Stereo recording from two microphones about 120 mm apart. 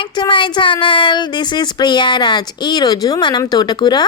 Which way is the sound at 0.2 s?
45° left (ahead or behind).